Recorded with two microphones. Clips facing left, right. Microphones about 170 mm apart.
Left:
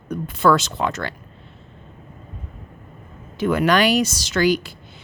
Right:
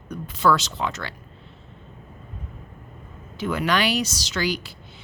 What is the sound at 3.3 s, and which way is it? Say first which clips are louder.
Speech: left 6 dB; 50° left (ahead or behind).